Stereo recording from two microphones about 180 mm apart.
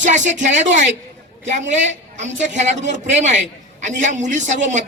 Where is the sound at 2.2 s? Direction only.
40° right (ahead or behind).